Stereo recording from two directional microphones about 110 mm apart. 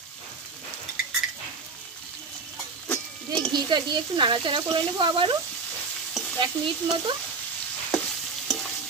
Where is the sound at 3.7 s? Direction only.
45° right (ahead or behind).